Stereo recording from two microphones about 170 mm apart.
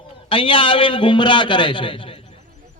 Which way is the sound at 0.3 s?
30° left (ahead or behind).